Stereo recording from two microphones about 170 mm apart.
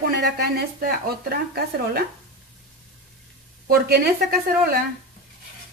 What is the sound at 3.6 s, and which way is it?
Speech, 65° right (ahead or behind).